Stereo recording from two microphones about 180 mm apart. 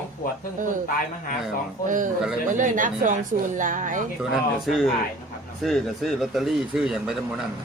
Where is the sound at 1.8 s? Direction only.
45° right (ahead or behind).